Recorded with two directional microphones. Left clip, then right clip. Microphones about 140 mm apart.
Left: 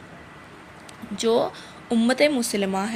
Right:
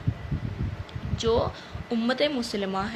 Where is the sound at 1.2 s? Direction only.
45° left (ahead or behind).